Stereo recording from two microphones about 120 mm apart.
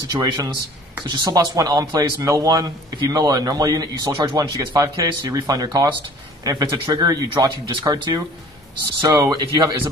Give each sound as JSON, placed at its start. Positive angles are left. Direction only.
{"t": 0.1, "sound": "speech", "side_deg": -30}